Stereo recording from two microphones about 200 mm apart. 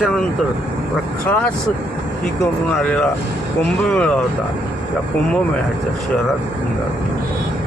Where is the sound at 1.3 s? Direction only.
5° left (ahead or behind).